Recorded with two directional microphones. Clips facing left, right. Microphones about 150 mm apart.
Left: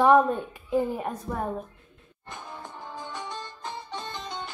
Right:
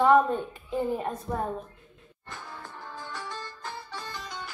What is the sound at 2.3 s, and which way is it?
Music, 20° left (ahead or behind).